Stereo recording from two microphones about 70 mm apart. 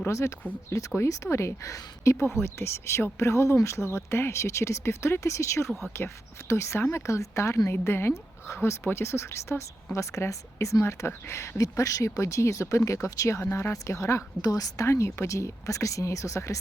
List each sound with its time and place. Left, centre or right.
0.1 s a woman's voice: left
5.6 s speech: centre
6.5 s a woman's voice: left
14.4 s a woman's voice: left
14.8 s a woman's voice: left